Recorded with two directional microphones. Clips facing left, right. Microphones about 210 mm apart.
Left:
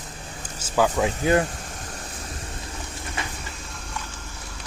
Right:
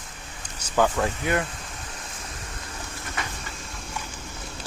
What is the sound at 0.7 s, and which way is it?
Speech, 5° left (ahead or behind).